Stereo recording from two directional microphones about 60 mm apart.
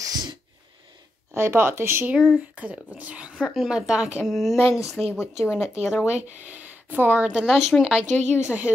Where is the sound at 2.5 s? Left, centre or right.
Right.